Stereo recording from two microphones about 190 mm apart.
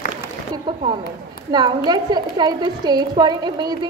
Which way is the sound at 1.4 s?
20° right (ahead or behind).